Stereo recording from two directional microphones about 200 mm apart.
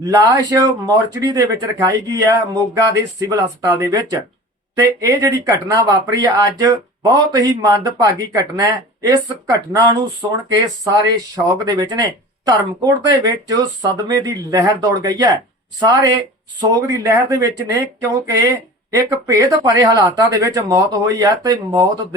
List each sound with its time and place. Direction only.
0.0 s speech: 15° right (ahead or behind)
10.8 s speech: 15° right (ahead or behind)